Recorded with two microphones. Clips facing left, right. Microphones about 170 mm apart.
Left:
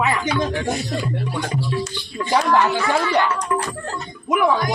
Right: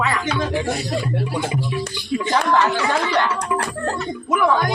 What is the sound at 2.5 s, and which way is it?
Speech, 15° left (ahead or behind).